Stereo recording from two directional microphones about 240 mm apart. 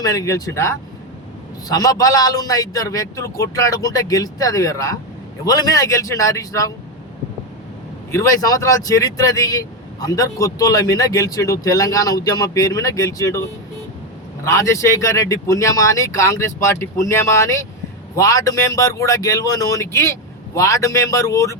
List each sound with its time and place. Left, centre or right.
0.0 s speech: centre
8.1 s speech: centre
14.4 s speech: centre